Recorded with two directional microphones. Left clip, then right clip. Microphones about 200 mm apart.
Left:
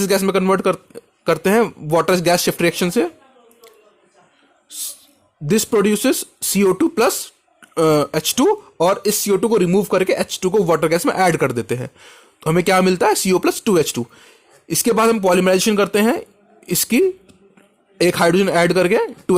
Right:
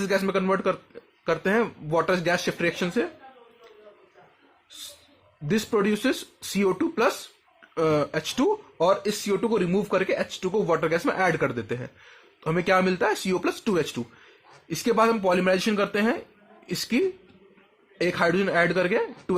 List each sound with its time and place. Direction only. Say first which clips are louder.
0.0 s speech: left 8 dB; 50° left (ahead or behind)
5.5 s speech: left 8 dB; 50° left (ahead or behind)